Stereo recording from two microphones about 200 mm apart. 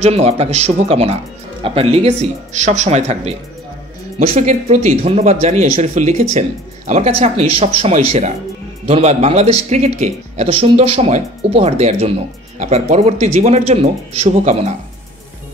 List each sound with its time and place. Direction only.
0.0 s speech: 30° right (ahead or behind)